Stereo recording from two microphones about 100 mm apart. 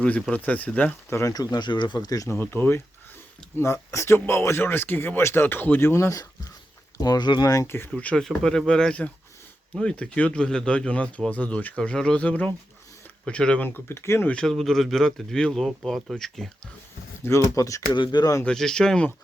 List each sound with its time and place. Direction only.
0.0 s speech: 10° left (ahead or behind)
1.3 s speech: 40° left (ahead or behind)
7.5 s speech: 35° left (ahead or behind)
7.9 s speech: 10° left (ahead or behind); by 14.3 s 25° left (ahead or behind)
14.3 s speech: 5° left (ahead or behind)
17.2 s speech: 30° left (ahead or behind)
17.9 s speech: 50° left (ahead or behind)
18.4 s speech: 5° left (ahead or behind)